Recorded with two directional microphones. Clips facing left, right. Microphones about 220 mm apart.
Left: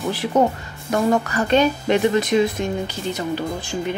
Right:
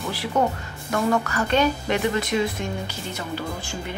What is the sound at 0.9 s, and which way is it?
A woman's voice, 25° left (ahead or behind).